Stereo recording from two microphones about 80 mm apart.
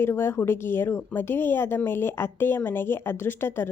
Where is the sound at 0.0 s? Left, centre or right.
Left.